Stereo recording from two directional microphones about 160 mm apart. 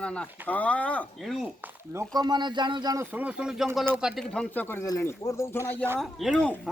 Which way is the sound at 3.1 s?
10° right (ahead or behind).